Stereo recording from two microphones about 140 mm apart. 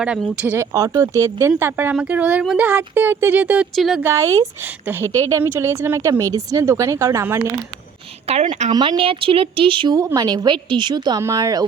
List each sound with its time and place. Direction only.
0.0 s speech: 5° right (ahead or behind)
4.0 s a woman's voice: 20° right (ahead or behind)
8.3 s a woman's voice: 50° right (ahead or behind)
8.7 s a woman's voice: 30° right (ahead or behind)